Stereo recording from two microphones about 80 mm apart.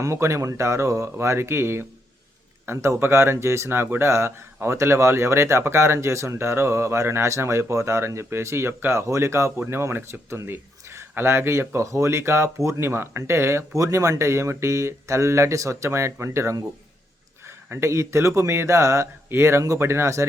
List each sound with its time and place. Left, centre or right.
0.0 s speech: right
17.7 s speech: right